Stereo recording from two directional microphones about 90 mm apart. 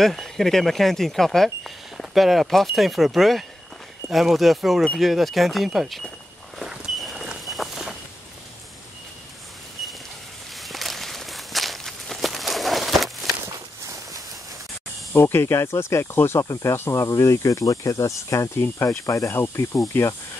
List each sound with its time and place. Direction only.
0.0 s speech: centre (ahead or behind)
6.6 s walk: 5° right (ahead or behind)
10.6 s walk: centre (ahead or behind)
13.5 s walk: 40° right (ahead or behind)
15.1 s speech: 25° left (ahead or behind)